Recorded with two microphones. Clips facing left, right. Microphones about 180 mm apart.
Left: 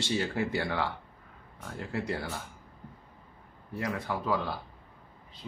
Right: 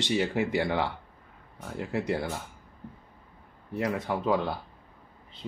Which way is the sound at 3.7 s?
20° right (ahead or behind).